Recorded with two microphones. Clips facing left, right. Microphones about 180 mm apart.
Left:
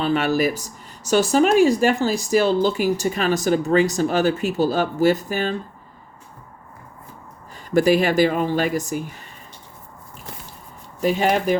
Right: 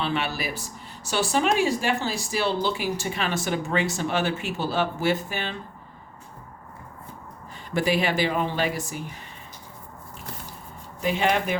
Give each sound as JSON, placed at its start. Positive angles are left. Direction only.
{"t": 0.0, "sound": "speech", "side_deg": 45}
{"t": 7.7, "sound": "speech", "side_deg": 45}
{"t": 11.0, "sound": "speech", "side_deg": 40}